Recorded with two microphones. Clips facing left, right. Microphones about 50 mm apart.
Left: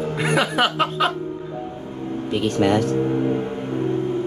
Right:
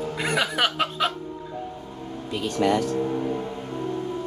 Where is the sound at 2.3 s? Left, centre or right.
Left.